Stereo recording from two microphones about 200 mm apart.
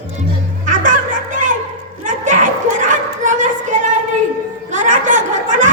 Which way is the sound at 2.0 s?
40° right (ahead or behind).